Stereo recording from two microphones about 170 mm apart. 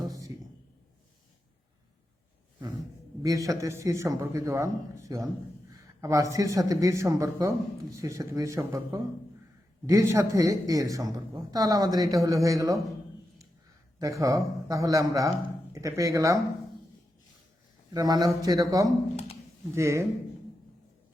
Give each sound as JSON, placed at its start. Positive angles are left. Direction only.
{"t": 0.0, "sound": "a sound", "side_deg": -20}
{"t": 3.2, "sound": "a man's voice", "side_deg": -20}
{"t": 14.0, "sound": "a man's voice", "side_deg": -20}
{"t": 17.9, "sound": "a man's voice", "side_deg": -20}